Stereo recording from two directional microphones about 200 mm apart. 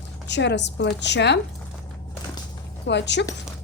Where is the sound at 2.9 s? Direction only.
60° left (ahead or behind).